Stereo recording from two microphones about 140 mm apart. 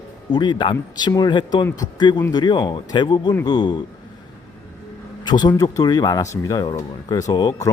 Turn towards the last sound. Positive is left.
turn(degrees=25)  # may be behind; listen again after turning